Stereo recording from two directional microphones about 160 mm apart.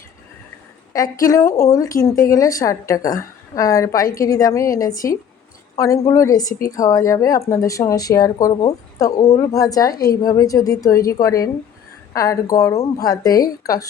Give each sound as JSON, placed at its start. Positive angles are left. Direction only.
{"t": 1.2, "sound": "a woman's voice", "side_deg": 20}